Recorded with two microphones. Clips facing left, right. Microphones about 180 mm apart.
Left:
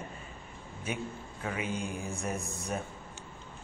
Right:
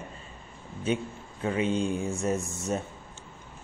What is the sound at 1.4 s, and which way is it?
A man's voice, 30° right (ahead or behind).